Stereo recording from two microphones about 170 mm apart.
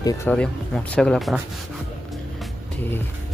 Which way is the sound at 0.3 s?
5° left (ahead or behind).